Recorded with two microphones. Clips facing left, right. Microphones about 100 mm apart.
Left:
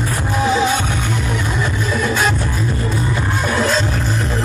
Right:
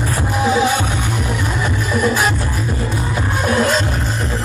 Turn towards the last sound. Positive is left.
turn(degrees=-10)  # may be behind; listen again after turning